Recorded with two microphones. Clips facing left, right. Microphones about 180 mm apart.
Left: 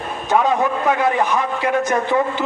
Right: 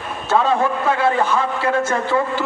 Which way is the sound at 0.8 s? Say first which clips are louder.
Even; 15° left (ahead or behind).